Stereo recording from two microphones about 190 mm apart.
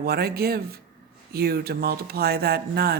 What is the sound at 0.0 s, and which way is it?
A woman's voice, 55° right (ahead or behind).